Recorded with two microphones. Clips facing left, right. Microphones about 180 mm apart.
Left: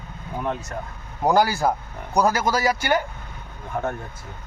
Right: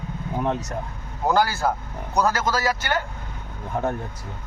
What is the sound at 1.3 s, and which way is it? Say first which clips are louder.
A man's voice: left 2 dB; 15° left (ahead or behind).